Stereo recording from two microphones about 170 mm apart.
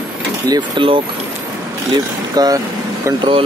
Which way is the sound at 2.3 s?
20° right (ahead or behind).